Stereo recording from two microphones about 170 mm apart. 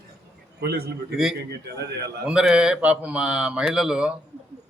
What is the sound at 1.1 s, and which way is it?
A man's voice, centre (ahead or behind).